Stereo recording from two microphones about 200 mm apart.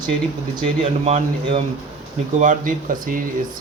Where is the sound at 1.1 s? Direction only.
35° right (ahead or behind).